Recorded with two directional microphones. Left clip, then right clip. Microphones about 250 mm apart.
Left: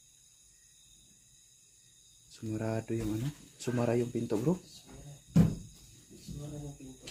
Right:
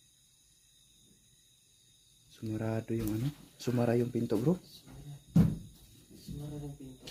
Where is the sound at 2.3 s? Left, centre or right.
Centre.